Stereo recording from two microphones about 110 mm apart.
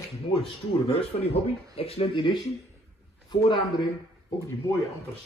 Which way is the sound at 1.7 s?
60° left (ahead or behind).